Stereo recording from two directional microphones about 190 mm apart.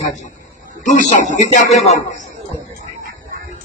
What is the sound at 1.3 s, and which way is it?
Speech, 40° left (ahead or behind).